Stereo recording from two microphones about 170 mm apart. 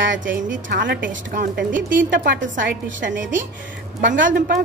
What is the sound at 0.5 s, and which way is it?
Speech, 85° right.